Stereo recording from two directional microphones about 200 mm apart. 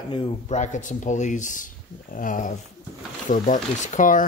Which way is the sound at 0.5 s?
40° left (ahead or behind).